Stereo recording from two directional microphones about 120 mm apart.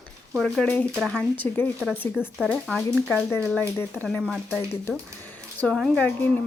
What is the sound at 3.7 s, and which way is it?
Speech, 15° left (ahead or behind).